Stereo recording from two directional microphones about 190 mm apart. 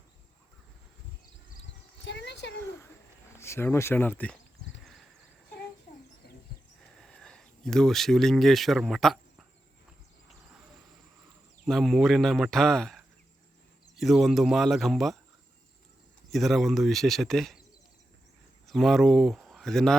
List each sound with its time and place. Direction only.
2.0 s a sound: 65° left (ahead or behind)
3.3 s speech: 15° left (ahead or behind)
6.2 s wild animals: 60° left (ahead or behind)
7.0 s speech: 5° left (ahead or behind)
11.6 s a man's voice: centre (ahead or behind)
16.3 s a man's voice: centre (ahead or behind)
18.6 s speech: centre (ahead or behind)